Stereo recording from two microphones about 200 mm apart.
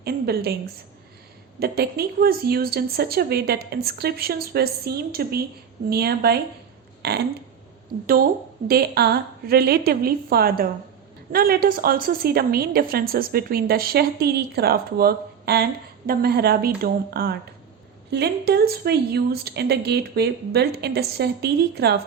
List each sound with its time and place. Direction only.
0.0 s a woman's voice: 50° right (ahead or behind)
1.5 s a woman's voice: 50° right (ahead or behind)
7.0 s a sound: 55° right (ahead or behind)
8.6 s a woman's voice: 50° right (ahead or behind)